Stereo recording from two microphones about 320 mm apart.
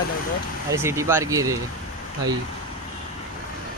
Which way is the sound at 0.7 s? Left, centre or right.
Centre.